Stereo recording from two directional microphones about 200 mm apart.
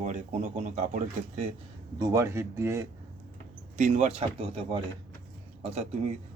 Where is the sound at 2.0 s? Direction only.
15° right (ahead or behind).